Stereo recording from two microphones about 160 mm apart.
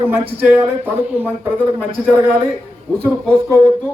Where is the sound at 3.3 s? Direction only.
15° right (ahead or behind).